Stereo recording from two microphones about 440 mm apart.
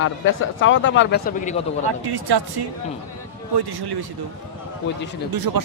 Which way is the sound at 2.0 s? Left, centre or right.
Right.